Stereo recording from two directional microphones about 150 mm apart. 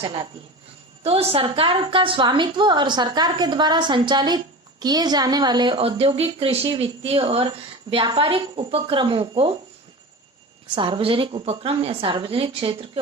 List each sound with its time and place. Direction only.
0.0 s a woman's voice: 35° right (ahead or behind)
10.8 s a woman's voice: 35° right (ahead or behind)